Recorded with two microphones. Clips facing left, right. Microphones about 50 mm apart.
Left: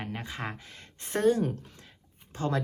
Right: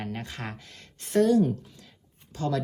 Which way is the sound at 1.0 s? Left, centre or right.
Left.